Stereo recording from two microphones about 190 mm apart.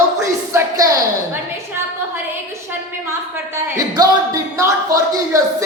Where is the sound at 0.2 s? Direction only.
15° right (ahead or behind).